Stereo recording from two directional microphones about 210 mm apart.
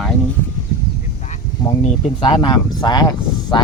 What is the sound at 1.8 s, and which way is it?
Speech, 25° left (ahead or behind).